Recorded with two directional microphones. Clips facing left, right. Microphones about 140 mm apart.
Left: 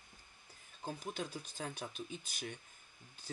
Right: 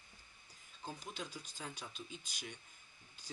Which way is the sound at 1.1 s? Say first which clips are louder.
Left 5 dB; 50° left (ahead or behind).